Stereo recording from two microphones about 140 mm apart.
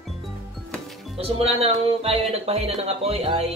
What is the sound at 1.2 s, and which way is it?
Speech, 45° right (ahead or behind).